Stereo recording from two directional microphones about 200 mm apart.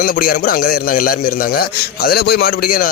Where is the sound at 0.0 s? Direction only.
45° left (ahead or behind).